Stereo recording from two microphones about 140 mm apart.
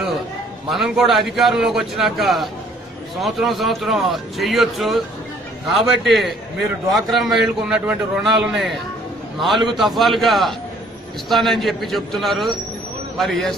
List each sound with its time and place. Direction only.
0.7 s a man's voice: 5° right (ahead or behind)